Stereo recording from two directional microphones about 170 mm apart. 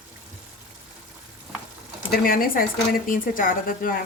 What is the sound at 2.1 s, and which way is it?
Stir, 55° left (ahead or behind).